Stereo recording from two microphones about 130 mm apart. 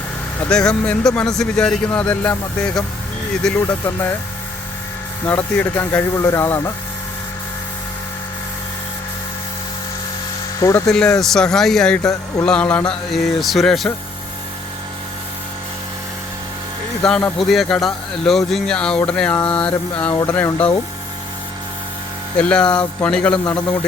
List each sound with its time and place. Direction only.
0.4 s speech: 5° left (ahead or behind)
5.2 s speech: 15° left (ahead or behind)
10.6 s speech: 25° left (ahead or behind)
10.9 s speech: 5° left (ahead or behind)
17.0 s speech: 5° left (ahead or behind)
22.4 s speech: 10° left (ahead or behind)